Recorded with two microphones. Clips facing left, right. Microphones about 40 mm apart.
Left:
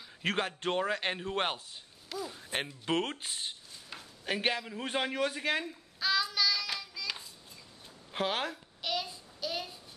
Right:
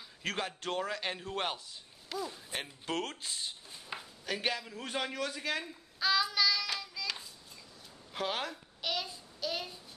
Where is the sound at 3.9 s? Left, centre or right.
Centre.